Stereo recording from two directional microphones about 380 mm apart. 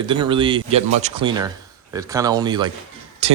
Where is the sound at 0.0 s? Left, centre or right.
Centre.